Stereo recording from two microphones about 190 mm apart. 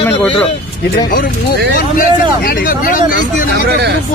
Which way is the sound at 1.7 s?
50° left (ahead or behind).